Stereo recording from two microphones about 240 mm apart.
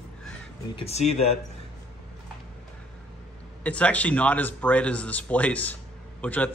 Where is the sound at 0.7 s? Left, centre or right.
Left.